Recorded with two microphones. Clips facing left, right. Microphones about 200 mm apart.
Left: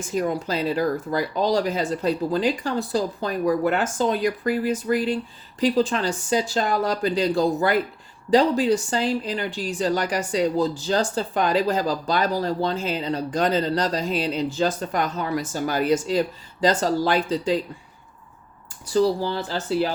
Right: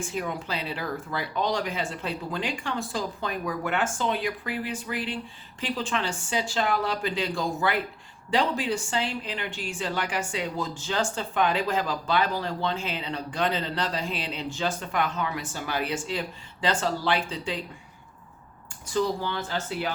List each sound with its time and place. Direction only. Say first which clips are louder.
0.0 s a woman's voice: left 7 dB; 40° left (ahead or behind)
18.9 s a woman's voice: left 6 dB; 35° left (ahead or behind)